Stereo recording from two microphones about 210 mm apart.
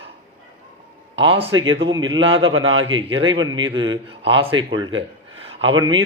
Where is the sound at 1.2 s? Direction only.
25° right (ahead or behind).